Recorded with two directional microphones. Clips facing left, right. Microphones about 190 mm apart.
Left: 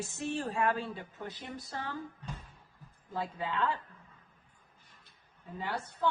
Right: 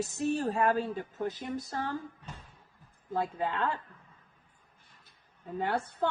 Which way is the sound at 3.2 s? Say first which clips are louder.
Right 3 dB; 50° right (ahead or behind).